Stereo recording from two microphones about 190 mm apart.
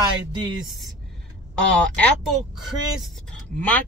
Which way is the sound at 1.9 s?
Centre (ahead or behind).